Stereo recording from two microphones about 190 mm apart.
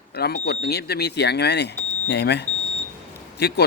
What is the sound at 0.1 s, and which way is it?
Speech, 60° left (ahead or behind).